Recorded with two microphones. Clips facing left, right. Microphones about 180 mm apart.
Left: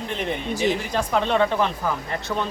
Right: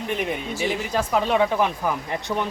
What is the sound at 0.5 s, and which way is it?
Speech, 20° left (ahead or behind).